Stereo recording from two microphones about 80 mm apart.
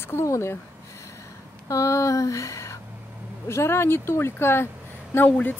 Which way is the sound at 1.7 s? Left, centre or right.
Left.